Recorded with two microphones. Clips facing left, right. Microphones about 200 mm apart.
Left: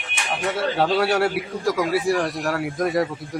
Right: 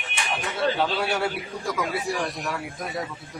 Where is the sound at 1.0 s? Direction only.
90° left.